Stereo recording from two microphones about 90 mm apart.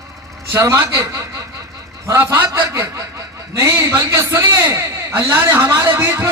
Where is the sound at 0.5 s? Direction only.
30° right (ahead or behind).